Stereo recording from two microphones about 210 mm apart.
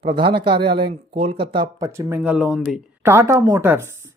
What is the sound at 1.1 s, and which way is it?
Speech, 25° right (ahead or behind).